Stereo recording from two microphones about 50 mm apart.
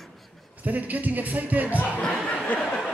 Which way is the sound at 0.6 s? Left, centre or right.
Right.